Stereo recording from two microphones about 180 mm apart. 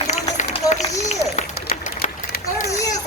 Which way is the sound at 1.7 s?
40° left (ahead or behind).